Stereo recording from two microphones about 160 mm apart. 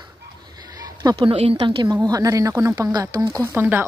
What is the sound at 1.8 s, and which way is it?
Speech, 25° right (ahead or behind).